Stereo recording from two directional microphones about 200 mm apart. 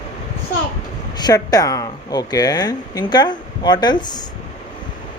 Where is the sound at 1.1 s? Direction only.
20° left (ahead or behind).